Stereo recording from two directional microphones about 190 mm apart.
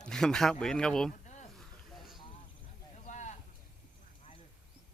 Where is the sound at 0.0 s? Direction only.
5° left (ahead or behind).